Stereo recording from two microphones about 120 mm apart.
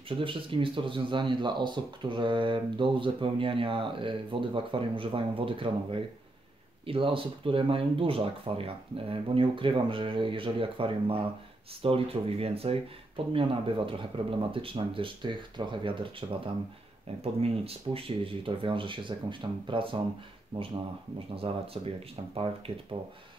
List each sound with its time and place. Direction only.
0.1 s speech: 45° right (ahead or behind)